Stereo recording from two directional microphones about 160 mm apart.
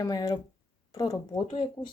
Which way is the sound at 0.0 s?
25° left (ahead or behind).